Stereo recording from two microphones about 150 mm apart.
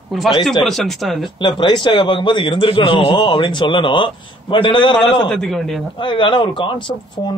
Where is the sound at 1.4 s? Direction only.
30° left (ahead or behind).